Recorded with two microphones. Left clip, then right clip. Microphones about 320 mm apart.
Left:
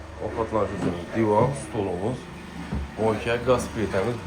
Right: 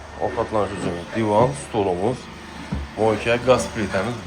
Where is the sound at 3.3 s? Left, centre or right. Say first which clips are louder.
Right 5 dB; centre.